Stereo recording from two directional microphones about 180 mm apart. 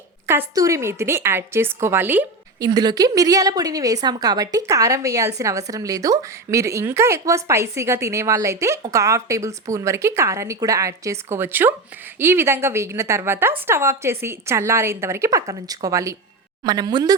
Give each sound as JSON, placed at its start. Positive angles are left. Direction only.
{"t": 0.3, "sound": "a woman's voice", "side_deg": -15}
{"t": 2.6, "sound": "a woman's voice", "side_deg": -20}